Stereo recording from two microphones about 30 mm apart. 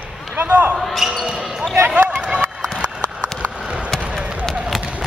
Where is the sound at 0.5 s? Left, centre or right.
Right.